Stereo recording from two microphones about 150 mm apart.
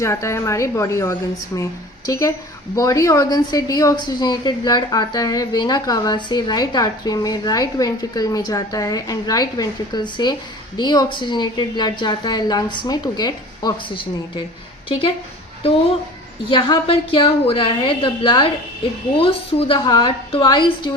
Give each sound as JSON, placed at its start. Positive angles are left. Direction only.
{"t": 0.0, "sound": "a woman's voice", "side_deg": 20}
{"t": 16.5, "sound": "a woman's voice", "side_deg": 35}